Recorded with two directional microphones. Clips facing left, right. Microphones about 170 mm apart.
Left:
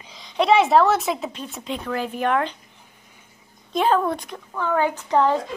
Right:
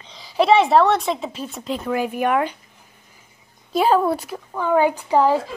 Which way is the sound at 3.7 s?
10° right (ahead or behind).